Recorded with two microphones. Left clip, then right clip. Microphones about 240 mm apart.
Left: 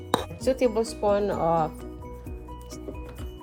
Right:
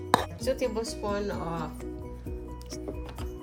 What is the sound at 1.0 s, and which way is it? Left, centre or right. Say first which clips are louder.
Speech: left 12 dB; left.